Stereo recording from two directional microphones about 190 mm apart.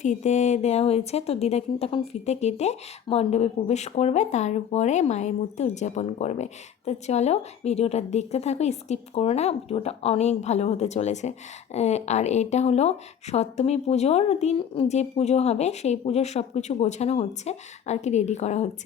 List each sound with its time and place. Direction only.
0.0 s speech: 40° left (ahead or behind)